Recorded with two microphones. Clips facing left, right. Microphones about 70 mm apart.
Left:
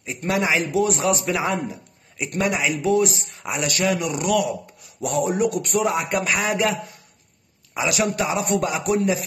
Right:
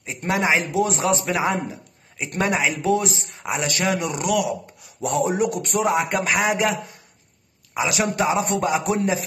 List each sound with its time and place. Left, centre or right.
0.0 s a man's voice: right
4.3 s speech: centre
5.2 s a man's voice: right